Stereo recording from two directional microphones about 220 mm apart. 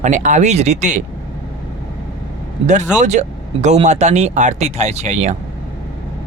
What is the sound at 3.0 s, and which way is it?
Speech, 30° right (ahead or behind).